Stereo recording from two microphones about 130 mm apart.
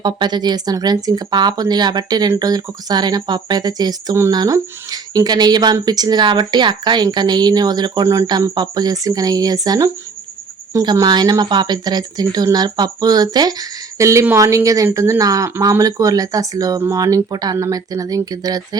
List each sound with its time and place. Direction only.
0.0 s speech: 35° right (ahead or behind)